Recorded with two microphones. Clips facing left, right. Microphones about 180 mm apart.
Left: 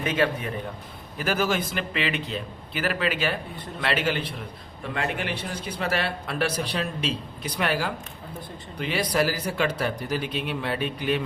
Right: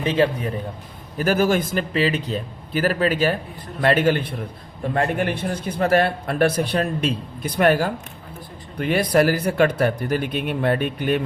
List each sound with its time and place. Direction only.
0.0 s a man's voice: 30° right (ahead or behind)
1.2 s a man's voice: 45° right (ahead or behind)